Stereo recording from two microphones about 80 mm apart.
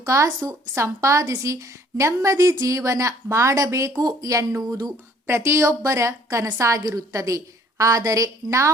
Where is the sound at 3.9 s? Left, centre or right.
Right.